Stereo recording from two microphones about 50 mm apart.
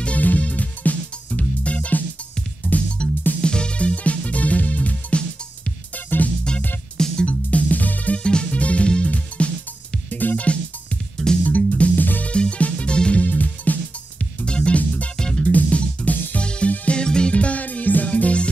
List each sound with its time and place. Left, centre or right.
0.0 s music: left
2.6 s music: left
3.0 s music: centre; by 8.2 s left
8.2 s music: centre
10.0 s music: left
12.3 s music: left
13.2 s music: left
14.4 s music: left
14.8 s music: left
15.1 s music: centre
15.5 s music: left
16.4 s music: centre
17.0 s music: centre
17.3 s music: left